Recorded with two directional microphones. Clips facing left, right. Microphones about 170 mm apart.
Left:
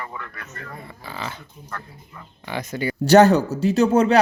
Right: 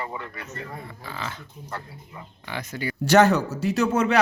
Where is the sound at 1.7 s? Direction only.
20° right (ahead or behind).